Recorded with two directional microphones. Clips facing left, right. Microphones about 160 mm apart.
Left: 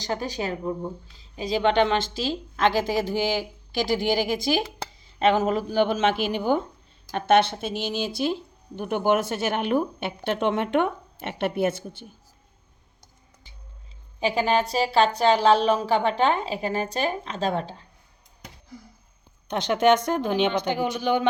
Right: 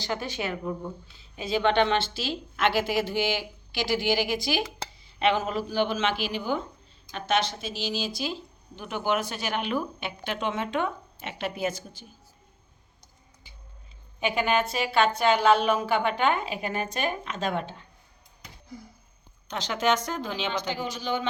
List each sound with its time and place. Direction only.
0.0 s a woman's voice: 35° left (ahead or behind)
3.8 s speech: 45° left (ahead or behind)
14.2 s a woman's voice: 30° left (ahead or behind)
19.5 s speech: 55° left (ahead or behind)